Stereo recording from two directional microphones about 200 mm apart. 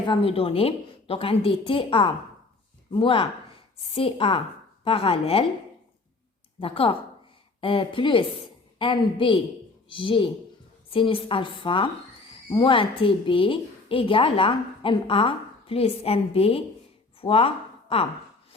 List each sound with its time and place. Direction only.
0.0 s a woman's voice: 25° left (ahead or behind)
6.6 s a woman's voice: 25° left (ahead or behind)
17.2 s a sound: 30° left (ahead or behind)